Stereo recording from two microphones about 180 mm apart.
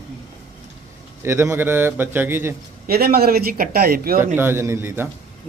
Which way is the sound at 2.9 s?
60° right (ahead or behind).